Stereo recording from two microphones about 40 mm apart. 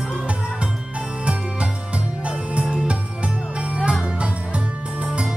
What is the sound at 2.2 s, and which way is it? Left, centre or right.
Music, right.